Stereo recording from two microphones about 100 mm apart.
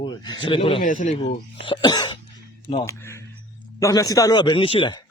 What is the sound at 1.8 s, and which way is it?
Cough, 45° left (ahead or behind).